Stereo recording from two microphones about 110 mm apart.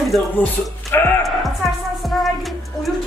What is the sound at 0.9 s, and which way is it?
Speech, 20° left (ahead or behind).